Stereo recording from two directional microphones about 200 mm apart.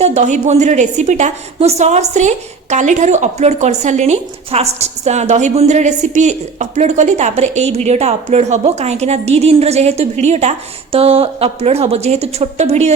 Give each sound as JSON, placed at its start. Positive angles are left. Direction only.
{"t": 0.0, "sound": "a woman's voice", "side_deg": -35}